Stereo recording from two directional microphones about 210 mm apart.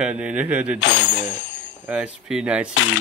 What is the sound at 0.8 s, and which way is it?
Speech, 60° left (ahead or behind).